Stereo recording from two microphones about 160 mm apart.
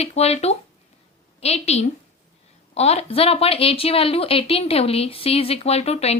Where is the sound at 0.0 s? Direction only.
40° left (ahead or behind).